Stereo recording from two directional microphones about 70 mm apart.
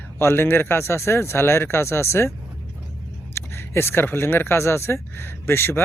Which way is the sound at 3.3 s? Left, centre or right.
Left.